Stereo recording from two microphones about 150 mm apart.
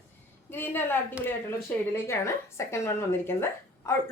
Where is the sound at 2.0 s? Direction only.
20° left (ahead or behind).